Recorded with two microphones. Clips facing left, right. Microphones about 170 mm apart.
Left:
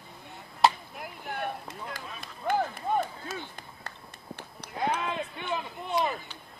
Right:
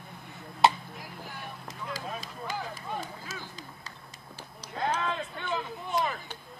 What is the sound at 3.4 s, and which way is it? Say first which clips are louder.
Run: left 1 dB; 60° left (ahead or behind).